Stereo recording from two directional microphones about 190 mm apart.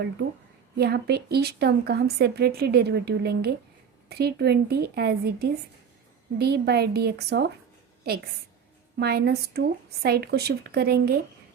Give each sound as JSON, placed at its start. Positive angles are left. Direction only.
{"t": 0.8, "sound": "a woman's voice", "side_deg": -60}
{"t": 9.0, "sound": "a woman's voice", "side_deg": -55}